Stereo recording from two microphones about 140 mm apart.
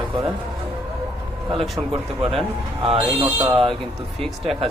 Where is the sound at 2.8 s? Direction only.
35° right (ahead or behind).